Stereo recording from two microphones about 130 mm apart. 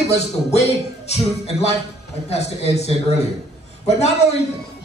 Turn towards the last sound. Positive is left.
turn(degrees=55)  # may be behind; listen again after turning